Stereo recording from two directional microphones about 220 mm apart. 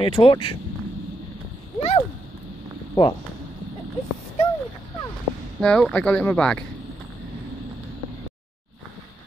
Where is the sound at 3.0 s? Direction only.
20° left (ahead or behind).